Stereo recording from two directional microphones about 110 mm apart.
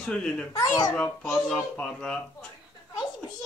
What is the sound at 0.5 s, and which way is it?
Speech, 35° left (ahead or behind).